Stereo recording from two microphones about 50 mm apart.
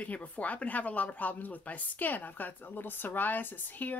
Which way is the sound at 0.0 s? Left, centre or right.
Left.